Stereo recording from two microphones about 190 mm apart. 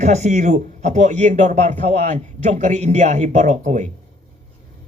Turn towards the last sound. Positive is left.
turn(degrees=-40)  # may be behind; listen again after turning